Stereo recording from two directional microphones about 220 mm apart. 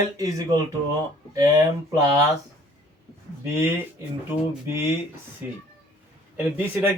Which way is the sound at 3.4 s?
10° right (ahead or behind).